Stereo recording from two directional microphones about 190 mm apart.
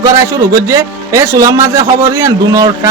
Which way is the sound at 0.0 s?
15° right (ahead or behind).